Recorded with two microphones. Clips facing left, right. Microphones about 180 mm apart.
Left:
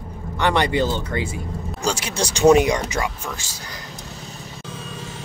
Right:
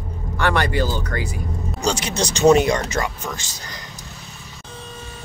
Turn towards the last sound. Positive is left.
turn(degrees=10)  # may be behind; listen again after turning